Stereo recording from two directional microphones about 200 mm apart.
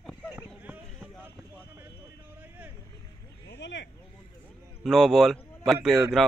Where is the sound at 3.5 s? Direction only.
60° left (ahead or behind).